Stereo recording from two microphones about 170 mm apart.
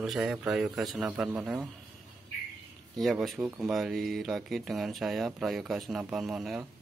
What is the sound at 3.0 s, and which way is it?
Speech, centre (ahead or behind).